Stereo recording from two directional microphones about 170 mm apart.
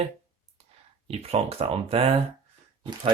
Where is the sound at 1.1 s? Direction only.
35° right (ahead or behind).